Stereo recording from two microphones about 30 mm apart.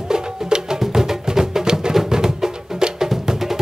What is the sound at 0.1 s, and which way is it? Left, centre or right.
Music, right.